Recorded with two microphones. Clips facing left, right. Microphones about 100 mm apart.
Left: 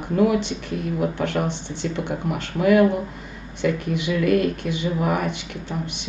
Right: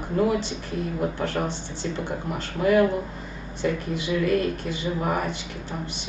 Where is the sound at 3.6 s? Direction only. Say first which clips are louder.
Left 3 dB; 60° left (ahead or behind).